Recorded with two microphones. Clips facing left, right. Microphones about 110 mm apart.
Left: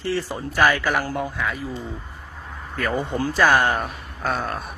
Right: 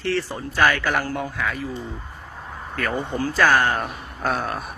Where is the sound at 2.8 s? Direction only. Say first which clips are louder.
Left 1 dB; centre (ahead or behind).